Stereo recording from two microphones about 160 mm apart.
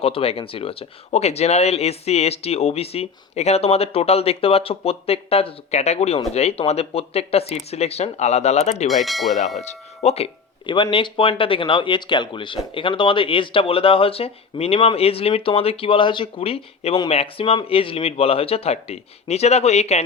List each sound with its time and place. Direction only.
0.0 s speech: 35° left (ahead or behind)
8.9 s speech: centre (ahead or behind)
9.6 s speech: 45° left (ahead or behind)